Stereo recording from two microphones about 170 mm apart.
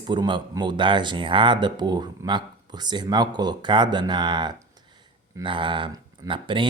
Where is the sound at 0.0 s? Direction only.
25° right (ahead or behind).